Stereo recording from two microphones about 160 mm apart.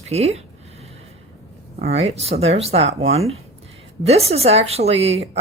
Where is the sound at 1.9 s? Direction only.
40° right (ahead or behind).